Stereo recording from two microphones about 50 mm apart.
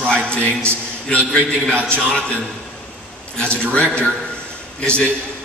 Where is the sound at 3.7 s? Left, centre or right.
Left.